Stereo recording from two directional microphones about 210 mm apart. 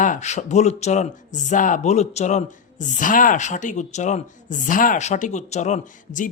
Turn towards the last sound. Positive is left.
turn(degrees=35)  # may be behind; listen again after turning